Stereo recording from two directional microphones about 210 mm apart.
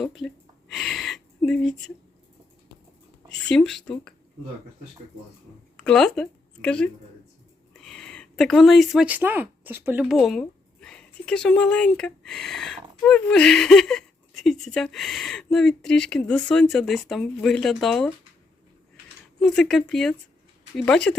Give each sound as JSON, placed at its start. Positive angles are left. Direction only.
{"t": 0.0, "sound": "speech", "side_deg": 0}
{"t": 0.7, "sound": "a sound", "side_deg": 0}
{"t": 3.5, "sound": "speech", "side_deg": 0}
{"t": 5.7, "sound": "speech", "side_deg": 5}
{"t": 19.4, "sound": "speech", "side_deg": 5}